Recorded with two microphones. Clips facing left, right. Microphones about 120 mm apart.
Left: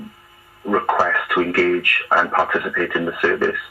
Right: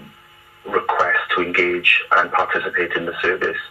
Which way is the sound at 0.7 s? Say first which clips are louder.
Left 1 dB; 40° left (ahead or behind).